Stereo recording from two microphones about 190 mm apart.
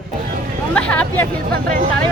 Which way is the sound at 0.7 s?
5° left (ahead or behind).